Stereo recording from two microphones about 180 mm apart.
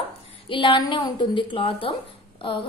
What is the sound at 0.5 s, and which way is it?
A woman's voice, 25° left (ahead or behind).